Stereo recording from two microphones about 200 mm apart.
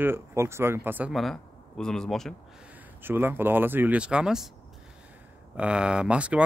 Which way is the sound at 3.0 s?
10° right (ahead or behind).